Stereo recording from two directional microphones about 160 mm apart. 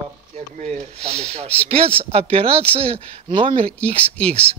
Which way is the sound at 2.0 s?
40° right (ahead or behind).